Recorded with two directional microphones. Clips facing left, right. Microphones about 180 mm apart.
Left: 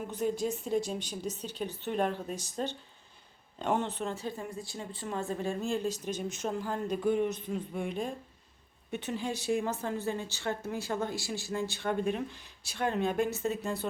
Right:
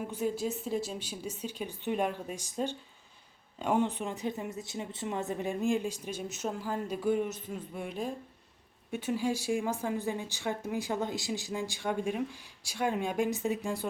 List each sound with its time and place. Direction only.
0.1 s speech: 5° right (ahead or behind)